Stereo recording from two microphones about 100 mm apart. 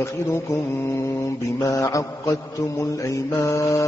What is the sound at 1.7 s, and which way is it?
Mantra, 30° left (ahead or behind).